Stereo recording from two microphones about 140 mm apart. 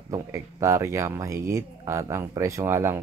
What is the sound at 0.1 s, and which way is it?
Speech, 20° right (ahead or behind).